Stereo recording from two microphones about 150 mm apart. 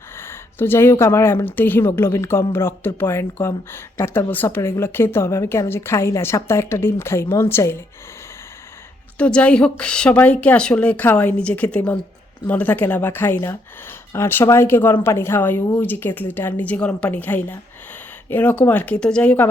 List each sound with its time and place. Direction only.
0.2 s speech: 15° left (ahead or behind)
9.1 s speech: 10° left (ahead or behind)